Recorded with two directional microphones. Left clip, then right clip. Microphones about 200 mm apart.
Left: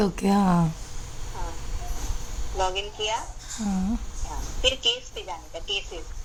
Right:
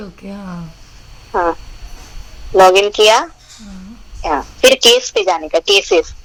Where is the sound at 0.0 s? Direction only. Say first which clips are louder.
Left 8 dB; 50° left (ahead or behind).